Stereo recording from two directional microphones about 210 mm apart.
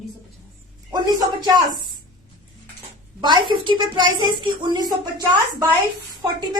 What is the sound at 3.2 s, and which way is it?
A woman's voice, 20° right (ahead or behind).